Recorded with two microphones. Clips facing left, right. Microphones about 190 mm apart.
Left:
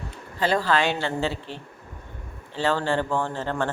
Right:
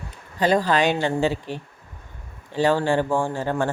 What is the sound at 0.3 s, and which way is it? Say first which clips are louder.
Speech: right 3 dB; 15° right (ahead or behind).